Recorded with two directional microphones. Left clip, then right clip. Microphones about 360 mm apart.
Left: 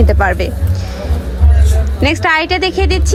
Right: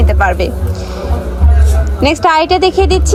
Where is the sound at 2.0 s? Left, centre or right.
Centre.